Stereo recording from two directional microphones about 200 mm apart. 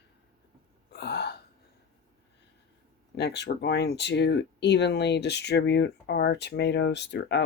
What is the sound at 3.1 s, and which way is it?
Speech, 60° left (ahead or behind).